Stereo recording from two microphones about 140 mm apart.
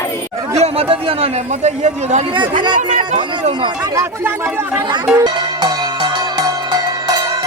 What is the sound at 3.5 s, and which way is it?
Chatter, 30° right (ahead or behind).